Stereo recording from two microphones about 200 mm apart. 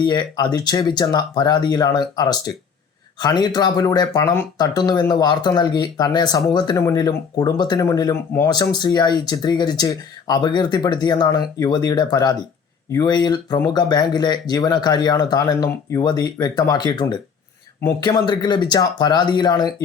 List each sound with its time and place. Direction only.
0.0 s speech: 20° left (ahead or behind)